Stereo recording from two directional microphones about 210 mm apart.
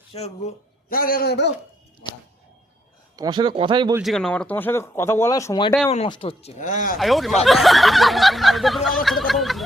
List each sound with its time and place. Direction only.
0.9 s a man's voice: 45° left (ahead or behind)
3.2 s speech: 20° right (ahead or behind)
4.0 s speech: centre (ahead or behind); by 7.0 s 40° left (ahead or behind)
7.0 s speech: centre (ahead or behind)